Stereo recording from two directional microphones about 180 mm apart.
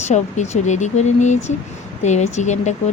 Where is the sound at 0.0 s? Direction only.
40° left (ahead or behind).